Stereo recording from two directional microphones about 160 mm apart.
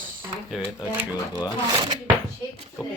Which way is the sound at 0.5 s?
10° right (ahead or behind).